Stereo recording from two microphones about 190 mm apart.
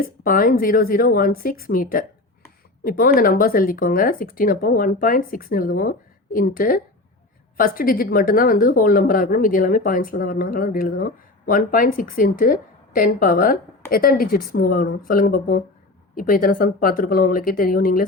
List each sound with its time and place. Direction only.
0.3 s a woman's voice: 45° left (ahead or behind)